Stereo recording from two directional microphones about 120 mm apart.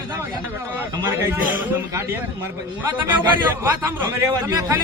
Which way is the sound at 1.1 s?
15° right (ahead or behind).